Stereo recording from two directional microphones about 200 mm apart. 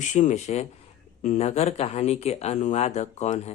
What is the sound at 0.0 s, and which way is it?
Speech, 35° left (ahead or behind).